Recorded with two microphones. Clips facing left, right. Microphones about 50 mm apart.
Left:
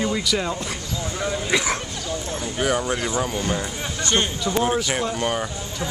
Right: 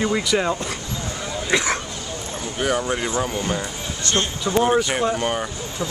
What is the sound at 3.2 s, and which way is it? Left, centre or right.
Speech, centre.